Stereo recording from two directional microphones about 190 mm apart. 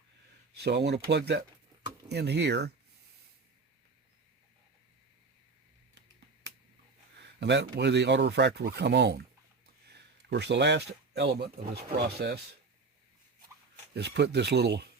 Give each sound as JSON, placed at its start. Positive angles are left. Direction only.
{"t": 0.5, "sound": "speech", "side_deg": -60}
{"t": 7.2, "sound": "speech", "side_deg": -65}
{"t": 9.8, "sound": "a sound", "side_deg": -60}
{"t": 11.7, "sound": "speech", "side_deg": -60}
{"t": 13.9, "sound": "speech", "side_deg": -60}